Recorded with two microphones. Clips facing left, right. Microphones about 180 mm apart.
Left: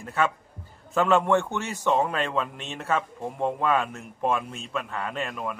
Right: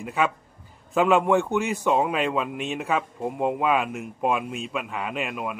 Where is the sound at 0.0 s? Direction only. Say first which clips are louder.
Right 1 dB; 15° right (ahead or behind).